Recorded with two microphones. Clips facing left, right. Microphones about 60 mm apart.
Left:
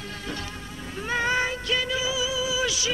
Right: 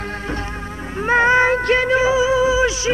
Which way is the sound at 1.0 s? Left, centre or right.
Right.